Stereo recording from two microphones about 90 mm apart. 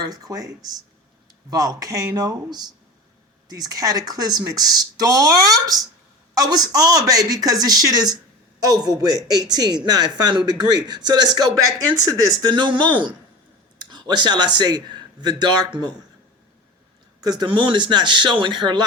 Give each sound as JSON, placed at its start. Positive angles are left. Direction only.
{"t": 0.0, "sound": "speech", "side_deg": -45}
{"t": 17.2, "sound": "speech", "side_deg": -50}